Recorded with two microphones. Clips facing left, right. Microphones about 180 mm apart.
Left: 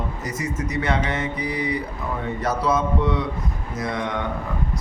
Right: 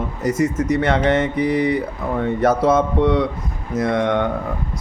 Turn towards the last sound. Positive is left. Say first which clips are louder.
# right 8 dB
turn(degrees=-60)  # may be behind; listen again after turning